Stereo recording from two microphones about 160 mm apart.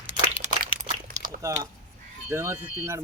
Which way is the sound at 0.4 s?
45° right (ahead or behind).